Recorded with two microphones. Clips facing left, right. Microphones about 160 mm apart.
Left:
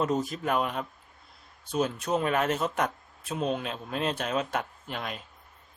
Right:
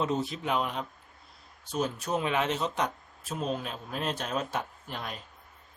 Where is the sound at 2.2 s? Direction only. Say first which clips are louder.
Left 2 dB; 45° left (ahead or behind).